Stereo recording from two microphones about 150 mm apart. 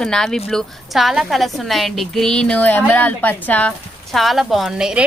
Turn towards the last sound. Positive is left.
turn(degrees=-5)  # may be behind; listen again after turning